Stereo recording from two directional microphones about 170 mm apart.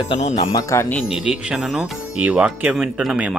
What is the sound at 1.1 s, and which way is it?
Speech, 5° right (ahead or behind).